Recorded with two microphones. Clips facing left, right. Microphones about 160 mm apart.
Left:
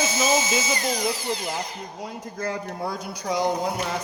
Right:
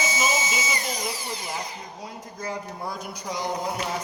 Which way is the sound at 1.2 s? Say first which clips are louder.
Left 5 dB; 90° left.